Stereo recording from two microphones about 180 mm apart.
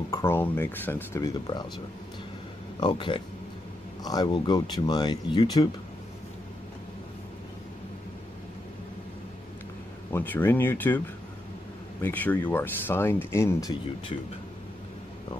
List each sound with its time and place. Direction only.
0.1 s speech: 15° left (ahead or behind)
2.8 s speech: 25° left (ahead or behind)
10.1 s speech: 10° left (ahead or behind)
12.0 s speech: 10° left (ahead or behind)